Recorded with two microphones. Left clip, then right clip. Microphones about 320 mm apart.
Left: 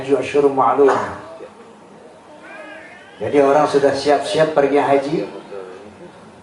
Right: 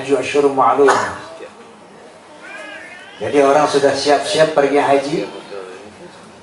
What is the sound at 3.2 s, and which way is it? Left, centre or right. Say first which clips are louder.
Speech: right 1 dB; centre.